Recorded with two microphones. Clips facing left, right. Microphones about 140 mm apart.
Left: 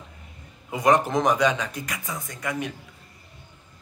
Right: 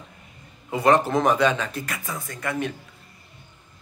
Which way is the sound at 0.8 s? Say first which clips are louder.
Right 1 dB; 15° left (ahead or behind).